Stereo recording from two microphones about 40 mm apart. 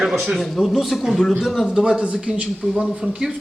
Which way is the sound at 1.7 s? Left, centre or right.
Centre.